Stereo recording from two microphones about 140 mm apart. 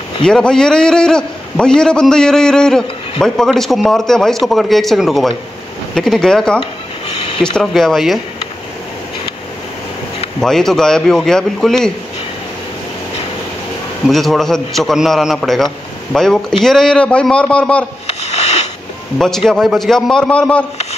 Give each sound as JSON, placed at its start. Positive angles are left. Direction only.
{"t": 0.2, "sound": "a man's voice", "side_deg": 5}
{"t": 10.4, "sound": "a man's voice", "side_deg": 5}
{"t": 14.0, "sound": "a man's voice", "side_deg": 0}
{"t": 18.0, "sound": "sniff", "side_deg": 50}
{"t": 19.1, "sound": "a man's voice", "side_deg": 5}